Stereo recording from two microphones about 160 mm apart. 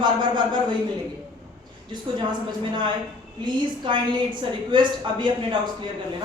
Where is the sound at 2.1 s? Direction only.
30° right (ahead or behind).